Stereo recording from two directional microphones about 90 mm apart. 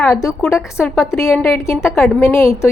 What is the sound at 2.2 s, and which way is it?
Speech, 30° left (ahead or behind).